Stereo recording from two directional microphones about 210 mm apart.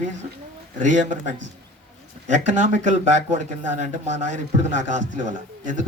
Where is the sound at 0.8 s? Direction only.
35° right (ahead or behind).